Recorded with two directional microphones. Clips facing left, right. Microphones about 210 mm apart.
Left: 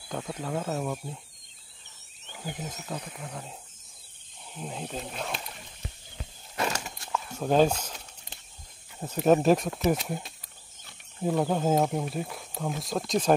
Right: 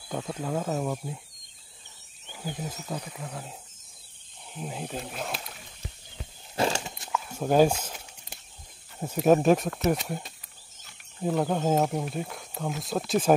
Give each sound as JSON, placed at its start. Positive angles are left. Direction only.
{"t": 0.3, "sound": "speech", "side_deg": 0}
{"t": 2.9, "sound": "speech", "side_deg": -5}
{"t": 4.6, "sound": "speech", "side_deg": -5}
{"t": 6.5, "sound": "a sound", "side_deg": -30}
{"t": 7.1, "sound": "a sound", "side_deg": -5}
{"t": 9.0, "sound": "speech", "side_deg": -10}